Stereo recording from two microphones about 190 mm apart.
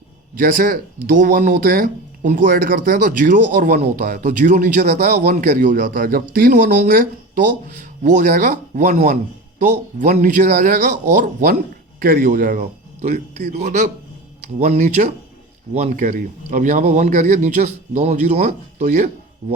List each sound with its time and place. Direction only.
0.3 s speech: 45° right (ahead or behind)